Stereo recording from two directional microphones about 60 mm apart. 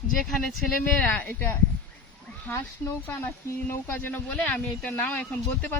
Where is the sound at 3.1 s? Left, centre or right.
Left.